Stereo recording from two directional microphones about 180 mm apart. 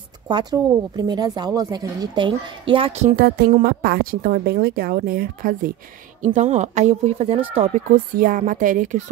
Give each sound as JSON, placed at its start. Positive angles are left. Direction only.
{"t": 0.3, "sound": "speech", "side_deg": -25}
{"t": 3.2, "sound": "speech", "side_deg": -60}
{"t": 6.2, "sound": "speech", "side_deg": -40}